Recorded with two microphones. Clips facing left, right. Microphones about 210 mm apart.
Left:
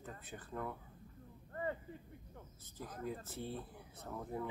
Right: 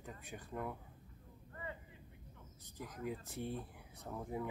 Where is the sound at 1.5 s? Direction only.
45° left (ahead or behind).